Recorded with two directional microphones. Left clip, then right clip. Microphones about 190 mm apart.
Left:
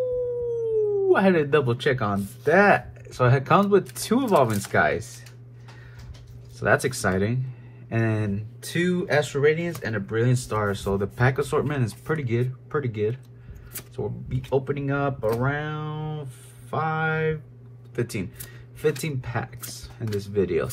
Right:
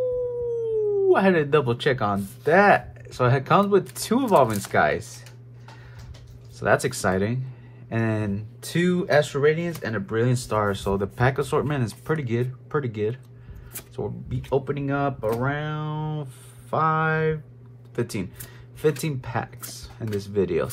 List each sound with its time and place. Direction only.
1.0 s speech: 10° right (ahead or behind)
6.6 s speech: 5° right (ahead or behind)